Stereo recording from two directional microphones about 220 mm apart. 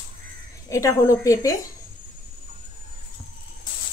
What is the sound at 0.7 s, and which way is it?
Speech, 15° left (ahead or behind).